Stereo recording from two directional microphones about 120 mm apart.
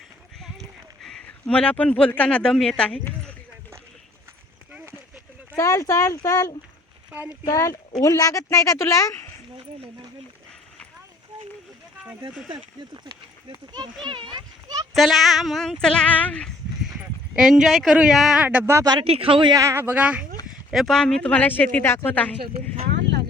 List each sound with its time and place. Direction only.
1.0 s speech: 5° left (ahead or behind)
5.5 s speech: 25° left (ahead or behind)
7.1 s speech: 15° right (ahead or behind)
7.4 s speech: 25° left (ahead or behind)
14.0 s a child's voice: 40° right (ahead or behind)
14.9 s speech: centre (ahead or behind)
17.0 s a man's voice: 5° right (ahead or behind)
18.4 s speech: 20° right (ahead or behind)
19.0 s speech: 50° right (ahead or behind)
19.5 s speech: 20° right (ahead or behind)
20.7 s speech: centre (ahead or behind)